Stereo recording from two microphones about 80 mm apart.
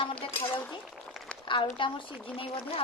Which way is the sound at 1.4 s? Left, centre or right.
Left.